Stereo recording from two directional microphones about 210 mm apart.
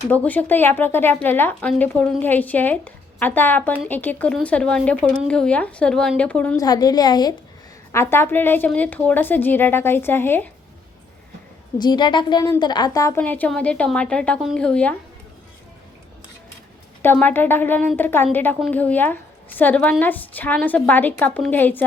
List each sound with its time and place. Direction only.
0.1 s a woman's voice: 5° left (ahead or behind)
6.6 s a woman's voice: 20° left (ahead or behind)
11.8 s a woman's voice: 20° left (ahead or behind); by 14.9 s 5° left (ahead or behind)
17.0 s a woman's voice: 10° left (ahead or behind)